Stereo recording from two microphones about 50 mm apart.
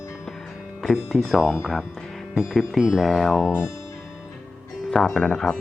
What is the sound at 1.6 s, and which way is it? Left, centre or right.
Speech, centre.